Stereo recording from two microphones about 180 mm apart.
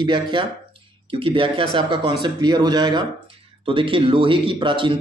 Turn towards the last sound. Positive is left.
turn(degrees=-30)  # may be behind; listen again after turning